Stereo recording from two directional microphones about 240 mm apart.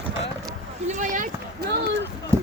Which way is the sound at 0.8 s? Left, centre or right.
Right.